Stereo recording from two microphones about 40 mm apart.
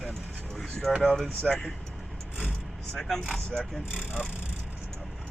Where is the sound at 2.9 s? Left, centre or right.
Centre.